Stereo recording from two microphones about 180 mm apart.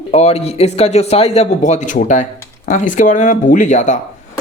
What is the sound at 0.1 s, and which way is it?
Speech, 35° left (ahead or behind).